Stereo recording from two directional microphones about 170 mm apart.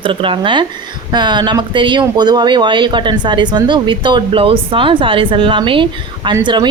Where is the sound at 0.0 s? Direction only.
30° right (ahead or behind).